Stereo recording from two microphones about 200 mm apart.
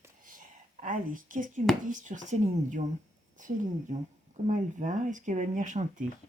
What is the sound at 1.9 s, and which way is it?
Speech, 40° right (ahead or behind).